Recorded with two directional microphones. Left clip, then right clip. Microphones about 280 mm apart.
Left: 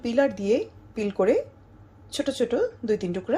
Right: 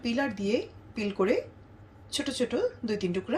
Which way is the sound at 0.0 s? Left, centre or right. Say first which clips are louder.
Left 7 dB; centre.